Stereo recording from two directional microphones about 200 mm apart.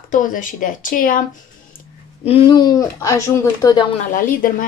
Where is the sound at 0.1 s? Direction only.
40° left (ahead or behind).